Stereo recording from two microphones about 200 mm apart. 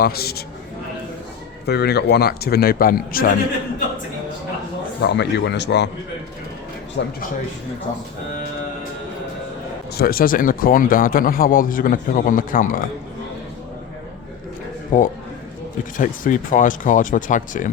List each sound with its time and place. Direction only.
0.0 s speech: 50° left (ahead or behind)
1.6 s speech: 55° left (ahead or behind)
5.0 s speech: 60° left (ahead or behind)
7.0 s speech: 60° left (ahead or behind)
10.0 s speech: 45° left (ahead or behind)
14.9 s speech: 40° left (ahead or behind)